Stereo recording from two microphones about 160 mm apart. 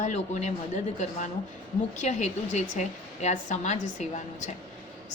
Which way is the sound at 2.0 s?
45° left (ahead or behind).